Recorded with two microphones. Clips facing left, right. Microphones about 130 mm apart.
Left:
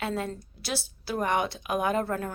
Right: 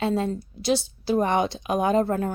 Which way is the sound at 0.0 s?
25° right (ahead or behind).